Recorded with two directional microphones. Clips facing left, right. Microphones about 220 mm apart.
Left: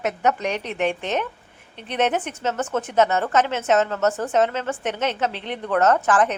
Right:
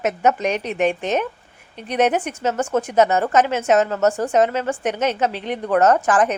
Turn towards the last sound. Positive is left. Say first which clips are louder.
# right 3 dB
turn(degrees=-15)  # may be behind; listen again after turning